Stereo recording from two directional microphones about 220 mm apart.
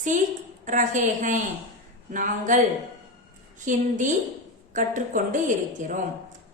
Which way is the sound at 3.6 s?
35° right (ahead or behind).